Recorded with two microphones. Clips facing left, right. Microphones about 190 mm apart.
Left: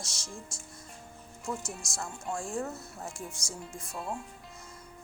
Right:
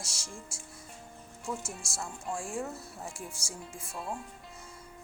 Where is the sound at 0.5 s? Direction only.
5° right (ahead or behind).